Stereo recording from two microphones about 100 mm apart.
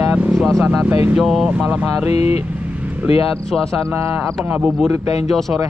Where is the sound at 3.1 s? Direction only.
70° left (ahead or behind).